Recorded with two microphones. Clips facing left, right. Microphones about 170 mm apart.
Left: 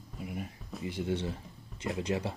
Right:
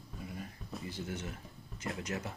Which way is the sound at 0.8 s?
25° left (ahead or behind).